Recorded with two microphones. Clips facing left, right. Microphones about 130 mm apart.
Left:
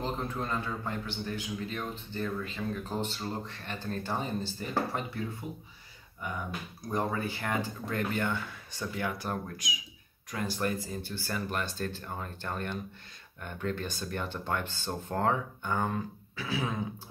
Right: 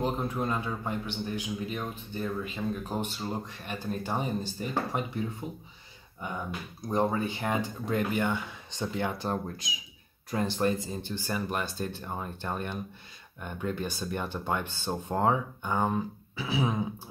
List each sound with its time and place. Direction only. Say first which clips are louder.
0.0 s a man's voice: right 4 dB; 15° right (ahead or behind)
6.8 s a man's voice: right 4 dB; 25° right (ahead or behind)